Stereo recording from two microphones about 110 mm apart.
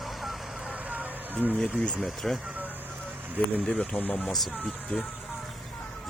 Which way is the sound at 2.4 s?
15° right (ahead or behind).